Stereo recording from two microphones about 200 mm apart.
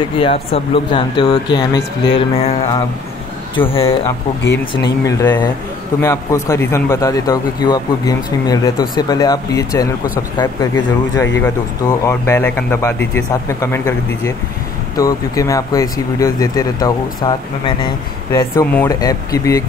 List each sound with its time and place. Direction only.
0.2 s speech: 25° left (ahead or behind)
3.6 s speech: 10° left (ahead or behind)
5.0 s speech: 15° left (ahead or behind)
18.6 s speech: 10° left (ahead or behind)